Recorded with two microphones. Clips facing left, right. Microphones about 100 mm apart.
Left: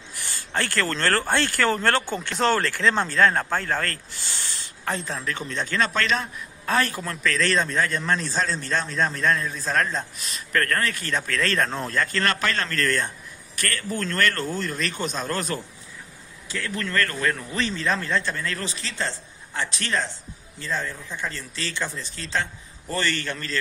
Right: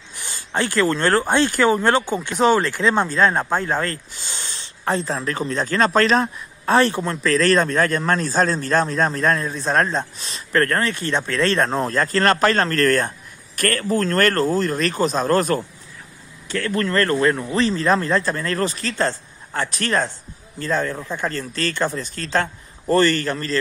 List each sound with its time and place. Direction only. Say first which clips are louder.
0.1 s speech: right 3 dB; 20° right (ahead or behind)
4.8 s a man's voice: right 6 dB; 35° right (ahead or behind)
16.4 s speech: right 8 dB; 60° right (ahead or behind)
16.8 s speech: right 7 dB; 40° right (ahead or behind)